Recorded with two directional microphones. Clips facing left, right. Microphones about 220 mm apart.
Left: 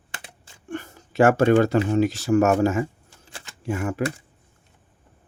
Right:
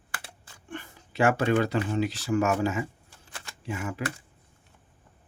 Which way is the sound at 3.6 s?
45° left (ahead or behind).